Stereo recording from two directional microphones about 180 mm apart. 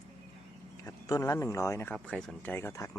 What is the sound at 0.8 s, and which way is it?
Speech, 20° left (ahead or behind).